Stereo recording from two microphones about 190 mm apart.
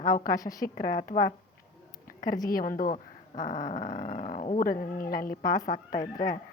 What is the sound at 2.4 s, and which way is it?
A woman's voice, 50° left (ahead or behind).